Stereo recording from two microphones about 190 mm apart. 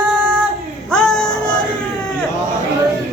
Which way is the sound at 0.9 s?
5° left (ahead or behind).